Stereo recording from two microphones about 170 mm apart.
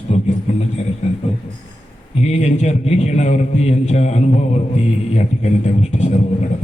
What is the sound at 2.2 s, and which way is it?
A man's voice, 40° left (ahead or behind).